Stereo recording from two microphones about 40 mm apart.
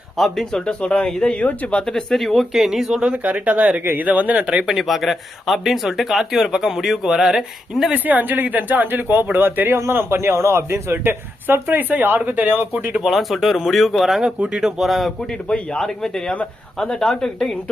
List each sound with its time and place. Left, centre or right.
0.2 s speech: centre
0.6 s speech: left
1.9 s speech: centre
2.5 s speech: centre
3.2 s speech: right
4.6 s speech: centre
7.9 s speech: right
10.9 s speech: right
13.0 s speech: centre
14.2 s speech: centre
14.8 s speech: centre
15.4 s speech: left
15.8 s speech: centre